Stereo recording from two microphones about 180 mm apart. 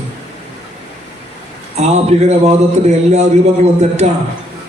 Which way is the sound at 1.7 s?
35° right (ahead or behind).